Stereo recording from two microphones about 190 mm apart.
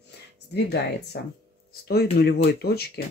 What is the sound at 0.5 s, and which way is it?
Speech, 60° left (ahead or behind).